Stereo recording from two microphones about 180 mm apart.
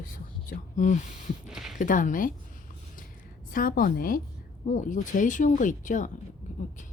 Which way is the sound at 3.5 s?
50° left (ahead or behind).